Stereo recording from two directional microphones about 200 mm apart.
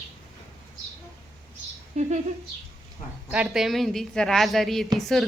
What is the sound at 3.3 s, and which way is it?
Speech, 5° right (ahead or behind).